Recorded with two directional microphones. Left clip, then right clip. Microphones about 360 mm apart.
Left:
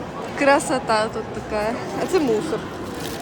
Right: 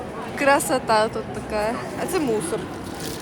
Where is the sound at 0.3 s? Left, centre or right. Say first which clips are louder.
Left 1 dB; centre.